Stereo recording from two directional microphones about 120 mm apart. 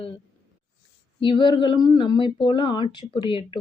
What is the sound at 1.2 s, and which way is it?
A woman's voice, 45° left (ahead or behind).